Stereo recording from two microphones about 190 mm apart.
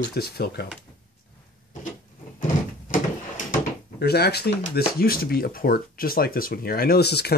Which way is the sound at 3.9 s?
60° left (ahead or behind).